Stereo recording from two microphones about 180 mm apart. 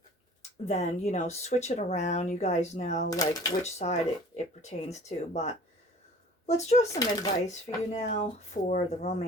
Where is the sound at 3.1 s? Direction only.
20° left (ahead or behind).